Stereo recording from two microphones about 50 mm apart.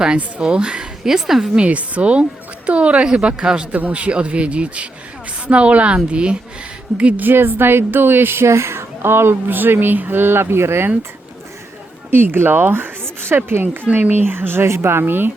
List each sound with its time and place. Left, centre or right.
0.2 s speech: right
1.0 s a woman's voice: centre
1.5 s speech: right
3.7 s speech: right
8.4 s speech: right
10.4 s speech: right
12.1 s speech: right